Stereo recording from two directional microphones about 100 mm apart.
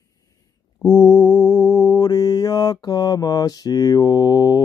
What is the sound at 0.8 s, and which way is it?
Mantra, 40° left (ahead or behind).